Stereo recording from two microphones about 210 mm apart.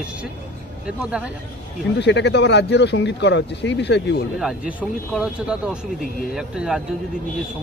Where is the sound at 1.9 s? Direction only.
55° left (ahead or behind).